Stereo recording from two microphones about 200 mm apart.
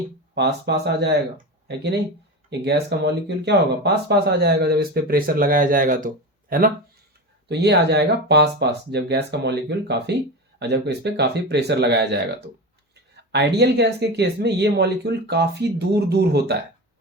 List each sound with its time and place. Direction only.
0.3 s speech: 55° right (ahead or behind)
7.4 s speech: 55° right (ahead or behind)